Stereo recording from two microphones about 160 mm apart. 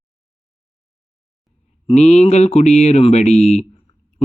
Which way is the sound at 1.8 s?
45° left (ahead or behind).